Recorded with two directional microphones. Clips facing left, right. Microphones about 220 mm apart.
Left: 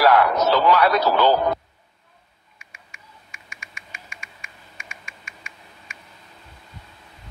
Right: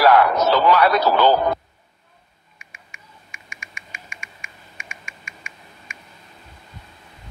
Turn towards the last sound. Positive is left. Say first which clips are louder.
# right 2 dB
turn(degrees=-15)  # may be behind; listen again after turning